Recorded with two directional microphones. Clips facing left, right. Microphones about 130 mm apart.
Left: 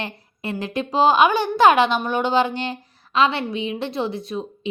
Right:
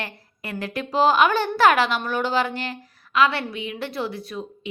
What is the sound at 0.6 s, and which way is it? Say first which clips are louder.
A woman's voice: left 2 dB; 20° left (ahead or behind).